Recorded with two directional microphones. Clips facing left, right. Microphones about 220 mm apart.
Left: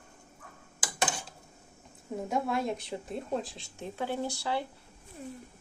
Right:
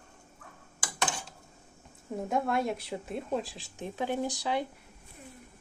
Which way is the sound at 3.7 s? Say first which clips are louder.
Right 2 dB; 15° right (ahead or behind).